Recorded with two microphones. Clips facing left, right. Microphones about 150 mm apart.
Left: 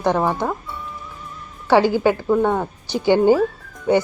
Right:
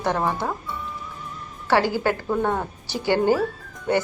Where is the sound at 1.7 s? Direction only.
15° left (ahead or behind).